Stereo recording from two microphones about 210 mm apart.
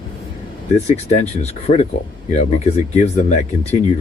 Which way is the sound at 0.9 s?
30° left (ahead or behind).